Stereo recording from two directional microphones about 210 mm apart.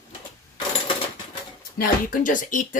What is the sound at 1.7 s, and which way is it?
Speech, 40° left (ahead or behind).